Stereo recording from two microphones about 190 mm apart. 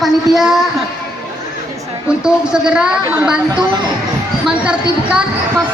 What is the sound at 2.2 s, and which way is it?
Speech, 5° right (ahead or behind).